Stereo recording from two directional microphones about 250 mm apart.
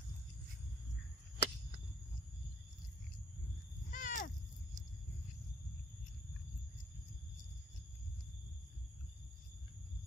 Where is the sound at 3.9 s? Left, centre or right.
Left.